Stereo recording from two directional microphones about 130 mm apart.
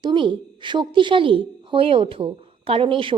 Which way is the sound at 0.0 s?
40° right (ahead or behind).